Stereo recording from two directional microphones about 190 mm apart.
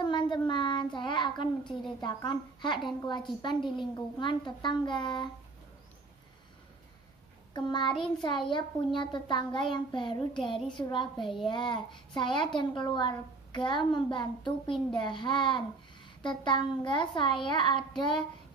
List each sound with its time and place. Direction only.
0.0 s a child's voice: 25° left (ahead or behind)
7.5 s a child's voice: 25° left (ahead or behind)